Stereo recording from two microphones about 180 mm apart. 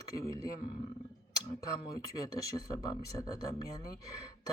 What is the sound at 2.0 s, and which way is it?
Speech, 20° left (ahead or behind).